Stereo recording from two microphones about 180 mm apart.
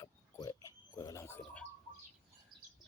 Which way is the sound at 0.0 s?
20° left (ahead or behind).